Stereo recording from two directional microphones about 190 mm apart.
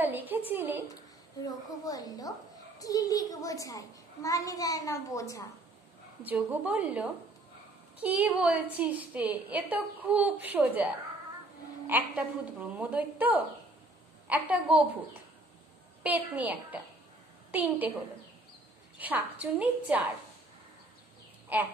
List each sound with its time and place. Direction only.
0.0 s a woman's voice: 10° right (ahead or behind)
1.4 s a child's voice: 20° left (ahead or behind)
6.2 s a woman's voice: 10° right (ahead or behind)
11.9 s a woman's voice: 10° right (ahead or behind)
16.0 s a woman's voice: 10° right (ahead or behind)
18.9 s a woman's voice: 10° right (ahead or behind)
21.5 s a woman's voice: 10° right (ahead or behind)